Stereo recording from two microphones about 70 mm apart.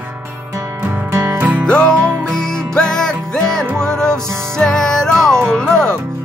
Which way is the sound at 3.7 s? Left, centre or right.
Right.